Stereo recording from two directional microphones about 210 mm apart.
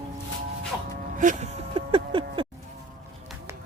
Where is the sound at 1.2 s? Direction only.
35° right (ahead or behind).